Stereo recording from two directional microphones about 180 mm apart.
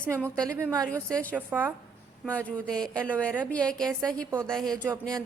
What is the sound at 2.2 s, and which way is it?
Speech, 5° left (ahead or behind).